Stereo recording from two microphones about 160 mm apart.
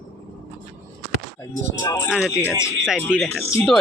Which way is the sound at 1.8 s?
15° left (ahead or behind).